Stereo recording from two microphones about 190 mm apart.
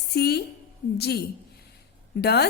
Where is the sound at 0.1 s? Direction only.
60° left (ahead or behind).